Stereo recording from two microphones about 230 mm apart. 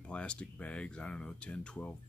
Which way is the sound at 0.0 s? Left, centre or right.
Centre.